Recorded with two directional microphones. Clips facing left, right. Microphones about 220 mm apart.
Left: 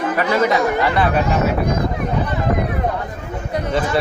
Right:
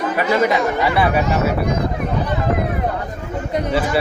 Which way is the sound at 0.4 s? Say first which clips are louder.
Even; 15° right (ahead or behind).